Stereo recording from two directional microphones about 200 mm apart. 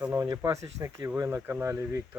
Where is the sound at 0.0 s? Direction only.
15° right (ahead or behind).